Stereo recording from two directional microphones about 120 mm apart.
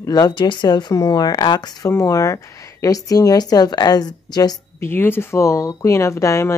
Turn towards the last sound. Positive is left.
turn(degrees=25)  # may be behind; listen again after turning